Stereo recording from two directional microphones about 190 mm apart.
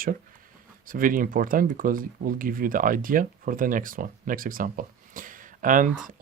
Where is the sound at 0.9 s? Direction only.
45° right (ahead or behind).